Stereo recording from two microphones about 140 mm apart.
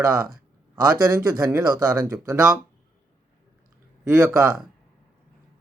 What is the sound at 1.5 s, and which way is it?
Speech, 5° right (ahead or behind).